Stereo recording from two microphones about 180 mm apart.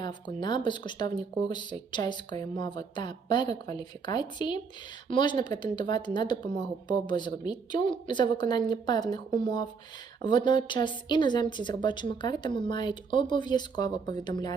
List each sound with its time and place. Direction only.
0.0 s speech: 25° left (ahead or behind)